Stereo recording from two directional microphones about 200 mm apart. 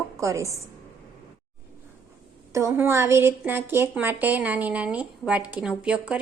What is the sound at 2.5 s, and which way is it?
A woman's voice, 15° right (ahead or behind).